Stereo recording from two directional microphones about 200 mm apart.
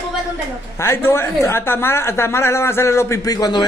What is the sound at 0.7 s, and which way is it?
Speech, 10° left (ahead or behind).